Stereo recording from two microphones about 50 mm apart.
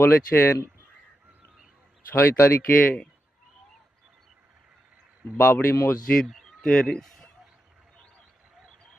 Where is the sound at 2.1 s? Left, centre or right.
Left.